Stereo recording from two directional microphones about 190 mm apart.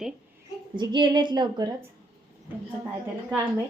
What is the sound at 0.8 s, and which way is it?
Speech, 25° right (ahead or behind).